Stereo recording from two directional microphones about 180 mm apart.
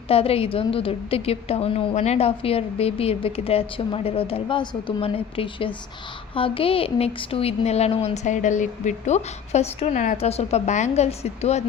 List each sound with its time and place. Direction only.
0.1 s a woman's voice: 30° left (ahead or behind)